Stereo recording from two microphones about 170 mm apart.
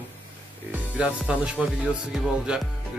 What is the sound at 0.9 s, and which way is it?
Speech, 5° right (ahead or behind).